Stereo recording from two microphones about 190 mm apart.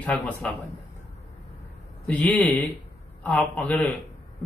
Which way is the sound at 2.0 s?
10° left (ahead or behind).